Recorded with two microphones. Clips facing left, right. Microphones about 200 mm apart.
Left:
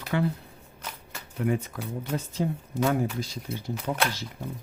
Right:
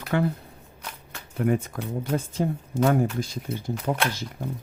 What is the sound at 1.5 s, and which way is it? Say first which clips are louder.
Speech: right 3 dB; 50° right (ahead or behind).